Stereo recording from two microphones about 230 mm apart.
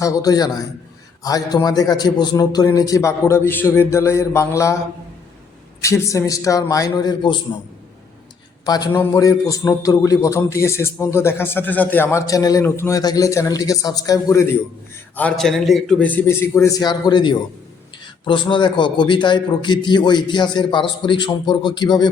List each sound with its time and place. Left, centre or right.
0.0 s a man's voice: centre
5.8 s a man's voice: centre
8.6 s a man's voice: centre
15.1 s a man's voice: centre